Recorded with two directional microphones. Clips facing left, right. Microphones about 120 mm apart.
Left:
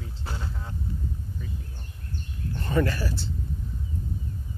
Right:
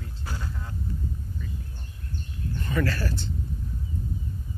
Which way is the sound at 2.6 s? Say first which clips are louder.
Left 3 dB; 30° left (ahead or behind).